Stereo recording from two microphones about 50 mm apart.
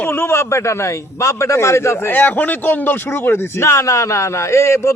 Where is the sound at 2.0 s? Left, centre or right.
Left.